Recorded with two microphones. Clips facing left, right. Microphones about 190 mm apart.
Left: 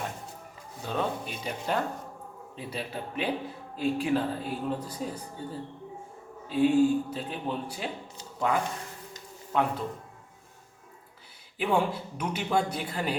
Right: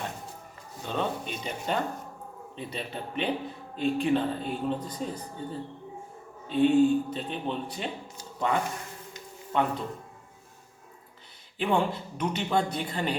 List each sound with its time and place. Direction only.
0.9 s speech: 5° left (ahead or behind)
11.5 s speech: 5° left (ahead or behind)